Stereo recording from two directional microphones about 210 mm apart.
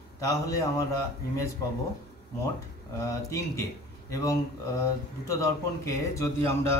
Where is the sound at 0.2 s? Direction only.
15° left (ahead or behind).